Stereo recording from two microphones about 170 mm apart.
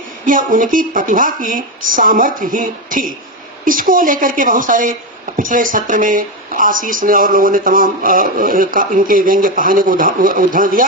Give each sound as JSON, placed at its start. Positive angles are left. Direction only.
{"t": 0.3, "sound": "speech", "side_deg": -50}